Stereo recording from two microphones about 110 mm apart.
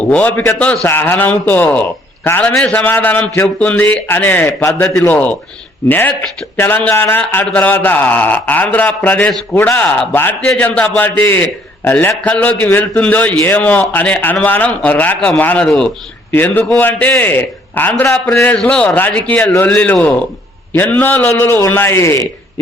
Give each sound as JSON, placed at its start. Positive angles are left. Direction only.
{"t": 0.0, "sound": "a man's voice", "side_deg": 10}
{"t": 16.3, "sound": "a man's voice", "side_deg": 15}